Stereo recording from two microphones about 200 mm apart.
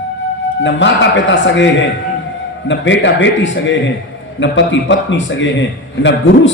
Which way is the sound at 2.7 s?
65° left (ahead or behind).